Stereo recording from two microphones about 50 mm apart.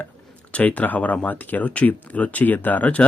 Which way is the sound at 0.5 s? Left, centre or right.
Left.